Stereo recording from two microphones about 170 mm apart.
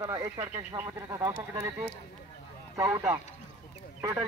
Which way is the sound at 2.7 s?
15° right (ahead or behind).